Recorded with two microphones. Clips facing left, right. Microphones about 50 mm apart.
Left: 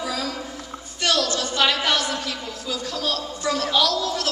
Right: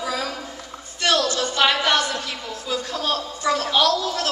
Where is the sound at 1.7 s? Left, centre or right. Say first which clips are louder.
Right 2 dB; right.